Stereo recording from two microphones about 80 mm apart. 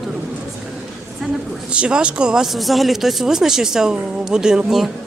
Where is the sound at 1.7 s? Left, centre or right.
Centre.